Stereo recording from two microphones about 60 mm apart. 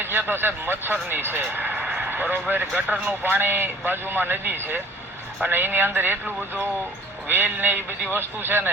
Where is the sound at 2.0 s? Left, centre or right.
Right.